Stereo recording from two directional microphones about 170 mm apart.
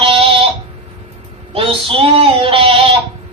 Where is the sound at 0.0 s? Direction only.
30° right (ahead or behind).